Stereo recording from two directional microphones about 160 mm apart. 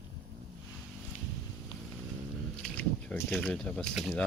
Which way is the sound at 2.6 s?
10° left (ahead or behind).